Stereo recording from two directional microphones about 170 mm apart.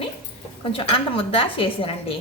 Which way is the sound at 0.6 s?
30° left (ahead or behind).